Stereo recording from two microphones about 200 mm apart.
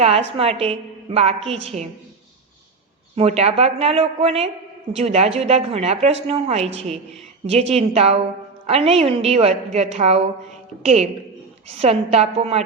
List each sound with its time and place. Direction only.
0.0 s a woman's voice: 30° right (ahead or behind)
3.2 s a woman's voice: 30° right (ahead or behind)